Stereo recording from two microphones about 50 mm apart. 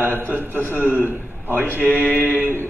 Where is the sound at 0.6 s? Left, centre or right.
Left.